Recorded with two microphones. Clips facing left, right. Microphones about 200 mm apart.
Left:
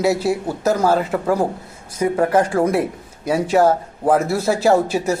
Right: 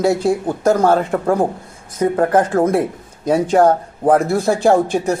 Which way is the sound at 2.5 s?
45° right (ahead or behind).